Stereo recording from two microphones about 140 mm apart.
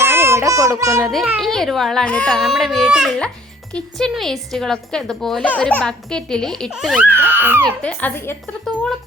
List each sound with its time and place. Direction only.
0.0 s a sound: 15° right (ahead or behind)
1.0 s a woman's voice: 5° right (ahead or behind)
6.9 s speech: 10° right (ahead or behind)
7.8 s speech: 10° left (ahead or behind)